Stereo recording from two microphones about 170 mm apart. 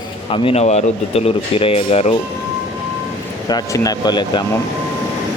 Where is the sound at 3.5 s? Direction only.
20° left (ahead or behind).